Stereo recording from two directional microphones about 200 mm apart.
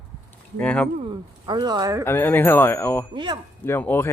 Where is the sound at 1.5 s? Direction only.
20° right (ahead or behind).